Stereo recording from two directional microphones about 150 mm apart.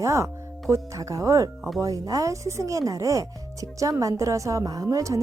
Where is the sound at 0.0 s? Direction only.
20° right (ahead or behind).